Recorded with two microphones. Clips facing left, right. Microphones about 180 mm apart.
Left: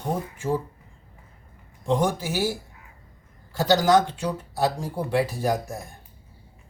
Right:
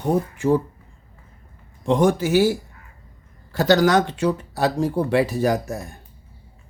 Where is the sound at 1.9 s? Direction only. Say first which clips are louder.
Right 6 dB; 70° right (ahead or behind).